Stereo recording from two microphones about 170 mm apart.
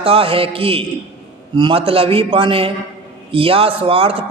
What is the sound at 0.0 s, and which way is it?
Speech, 35° right (ahead or behind).